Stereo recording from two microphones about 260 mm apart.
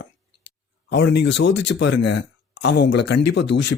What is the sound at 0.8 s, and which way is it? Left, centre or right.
Speech, left.